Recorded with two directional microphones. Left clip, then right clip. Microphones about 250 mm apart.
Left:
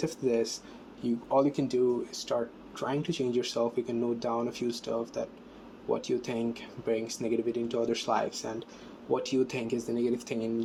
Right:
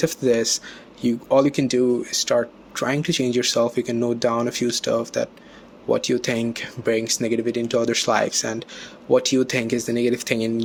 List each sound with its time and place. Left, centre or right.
0.0 s speech: right